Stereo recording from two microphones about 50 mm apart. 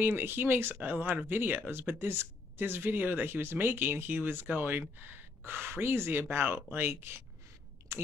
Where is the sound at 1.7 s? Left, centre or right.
Right.